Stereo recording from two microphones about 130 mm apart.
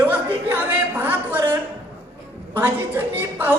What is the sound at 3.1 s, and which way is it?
Speech, 15° right (ahead or behind).